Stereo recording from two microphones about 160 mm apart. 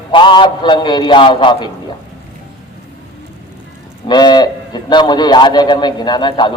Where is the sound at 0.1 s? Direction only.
30° left (ahead or behind).